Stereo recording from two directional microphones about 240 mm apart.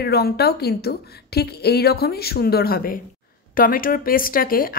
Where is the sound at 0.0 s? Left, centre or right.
Left.